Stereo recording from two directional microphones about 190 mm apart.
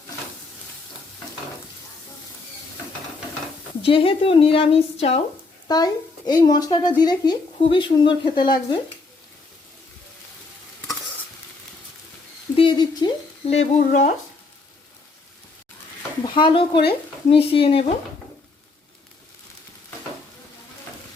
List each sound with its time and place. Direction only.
3.8 s speech: 30° left (ahead or behind)
5.6 s speech: 20° left (ahead or behind)
12.5 s a sound: 25° left (ahead or behind)
13.5 s speech: 35° left (ahead or behind)
16.2 s speech: 25° left (ahead or behind)